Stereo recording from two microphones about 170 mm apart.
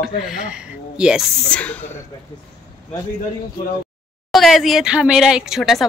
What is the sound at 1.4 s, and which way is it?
Speech, 10° left (ahead or behind).